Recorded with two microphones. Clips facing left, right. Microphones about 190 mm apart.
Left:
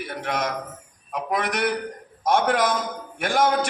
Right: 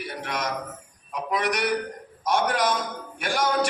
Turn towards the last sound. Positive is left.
turn(degrees=55)  # may be behind; listen again after turning